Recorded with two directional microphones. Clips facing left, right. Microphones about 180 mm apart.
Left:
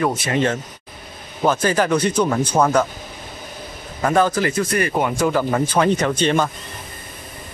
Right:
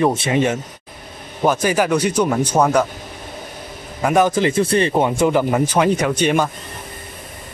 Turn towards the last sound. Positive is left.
turn(degrees=-10)  # may be behind; listen again after turning